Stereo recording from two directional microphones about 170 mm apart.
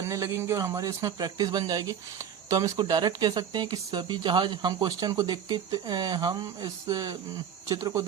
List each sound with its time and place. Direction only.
0.0 s speech: 15° right (ahead or behind)